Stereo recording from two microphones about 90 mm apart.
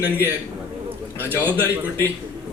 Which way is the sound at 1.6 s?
25° left (ahead or behind).